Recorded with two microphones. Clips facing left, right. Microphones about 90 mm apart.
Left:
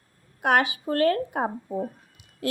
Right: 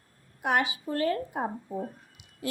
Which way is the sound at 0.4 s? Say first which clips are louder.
Left 5 dB; 60° left (ahead or behind).